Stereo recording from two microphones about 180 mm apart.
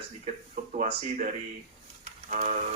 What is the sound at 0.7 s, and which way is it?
Mantra, 45° right (ahead or behind).